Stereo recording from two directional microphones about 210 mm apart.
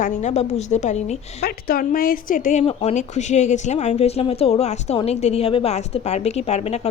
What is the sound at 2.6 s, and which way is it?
Speech, 25° left (ahead or behind).